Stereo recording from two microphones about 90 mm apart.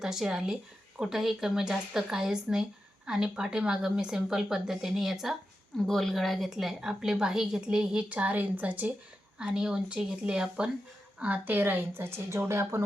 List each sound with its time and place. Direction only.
0.0 s a woman's voice: 5° right (ahead or behind); by 12.8 s 30° right (ahead or behind)